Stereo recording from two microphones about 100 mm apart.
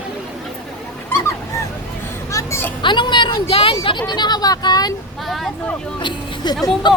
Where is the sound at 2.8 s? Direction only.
50° left (ahead or behind).